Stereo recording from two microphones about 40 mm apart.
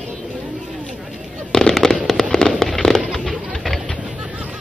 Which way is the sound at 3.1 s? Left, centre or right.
Centre.